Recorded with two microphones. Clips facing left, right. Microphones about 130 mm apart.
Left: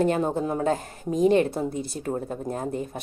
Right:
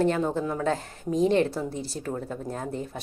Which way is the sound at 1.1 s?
15° left (ahead or behind).